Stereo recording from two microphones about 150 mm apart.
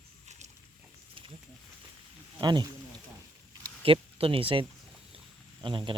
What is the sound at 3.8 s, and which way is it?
Speech, 40° right (ahead or behind).